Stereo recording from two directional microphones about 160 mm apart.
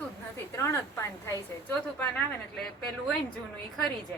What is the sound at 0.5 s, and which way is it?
Speech, 20° left (ahead or behind).